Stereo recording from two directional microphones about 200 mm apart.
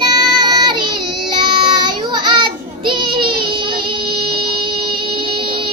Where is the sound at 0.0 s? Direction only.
20° right (ahead or behind).